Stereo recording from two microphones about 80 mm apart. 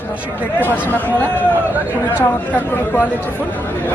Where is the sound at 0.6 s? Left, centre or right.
Left.